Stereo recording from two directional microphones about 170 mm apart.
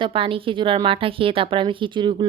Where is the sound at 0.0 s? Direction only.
30° right (ahead or behind).